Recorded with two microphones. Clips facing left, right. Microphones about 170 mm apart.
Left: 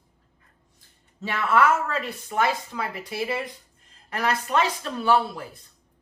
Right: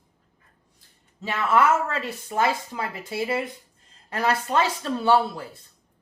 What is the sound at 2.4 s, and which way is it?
Speech, 25° right (ahead or behind).